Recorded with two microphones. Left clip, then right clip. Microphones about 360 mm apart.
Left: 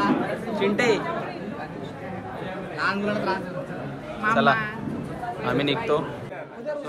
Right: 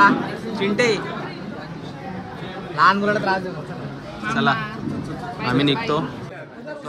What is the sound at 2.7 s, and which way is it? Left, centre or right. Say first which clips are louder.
Speech: right 10 dB; centre.